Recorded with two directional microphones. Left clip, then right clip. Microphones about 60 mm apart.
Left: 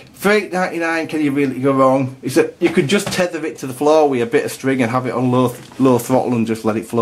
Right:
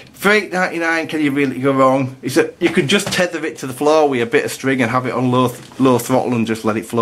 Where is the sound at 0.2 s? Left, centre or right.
Right.